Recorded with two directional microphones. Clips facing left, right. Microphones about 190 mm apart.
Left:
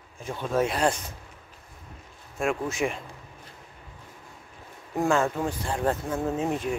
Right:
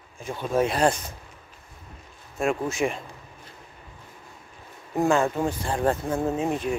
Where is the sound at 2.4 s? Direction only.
25° right (ahead or behind).